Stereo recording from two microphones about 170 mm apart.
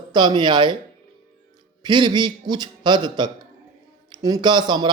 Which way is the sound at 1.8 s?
25° right (ahead or behind).